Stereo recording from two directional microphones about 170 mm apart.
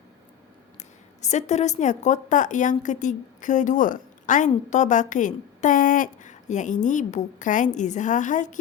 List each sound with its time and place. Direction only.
0.8 s a woman's voice: 45° left (ahead or behind)